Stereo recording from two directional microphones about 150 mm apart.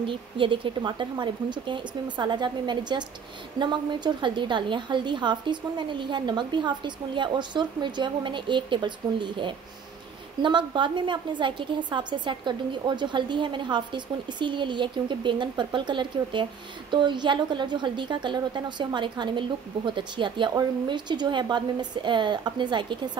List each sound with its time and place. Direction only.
0.0 s a woman's voice: 35° right (ahead or behind)